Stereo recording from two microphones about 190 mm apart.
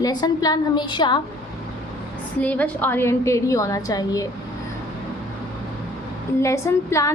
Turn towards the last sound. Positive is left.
turn(degrees=15)  # may be behind; listen again after turning